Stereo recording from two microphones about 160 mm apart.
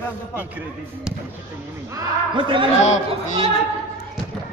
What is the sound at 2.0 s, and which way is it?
Speech, 30° right (ahead or behind).